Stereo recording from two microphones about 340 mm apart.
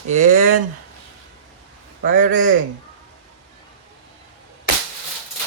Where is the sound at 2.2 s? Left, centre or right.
Right.